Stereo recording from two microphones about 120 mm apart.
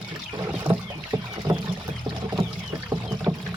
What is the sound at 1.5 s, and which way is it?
Rowboat, 35° right (ahead or behind).